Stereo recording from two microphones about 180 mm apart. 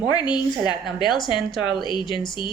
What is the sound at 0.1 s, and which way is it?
Speech, 25° left (ahead or behind).